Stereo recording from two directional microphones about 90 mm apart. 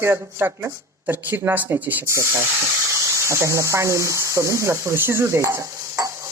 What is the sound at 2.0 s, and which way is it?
Speech, 30° right (ahead or behind).